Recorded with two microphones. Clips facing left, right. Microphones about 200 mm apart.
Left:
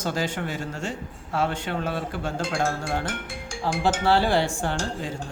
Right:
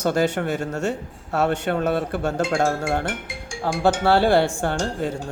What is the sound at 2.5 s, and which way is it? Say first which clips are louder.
Speech: right 5 dB; 45° right (ahead or behind).